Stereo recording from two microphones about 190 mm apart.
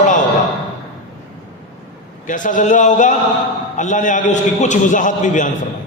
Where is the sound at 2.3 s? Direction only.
40° left (ahead or behind).